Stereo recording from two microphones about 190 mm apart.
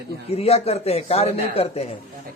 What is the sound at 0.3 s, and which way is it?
A man's voice, 30° left (ahead or behind).